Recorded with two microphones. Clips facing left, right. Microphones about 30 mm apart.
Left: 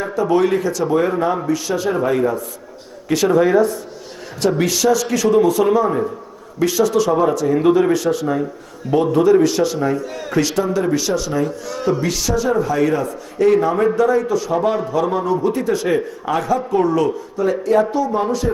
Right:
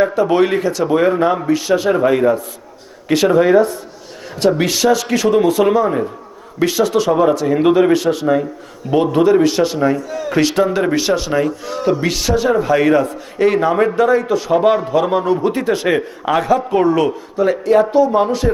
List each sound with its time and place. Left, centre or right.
0.0 s speech: right
4.6 s a man's voice: right
12.0 s a man's voice: right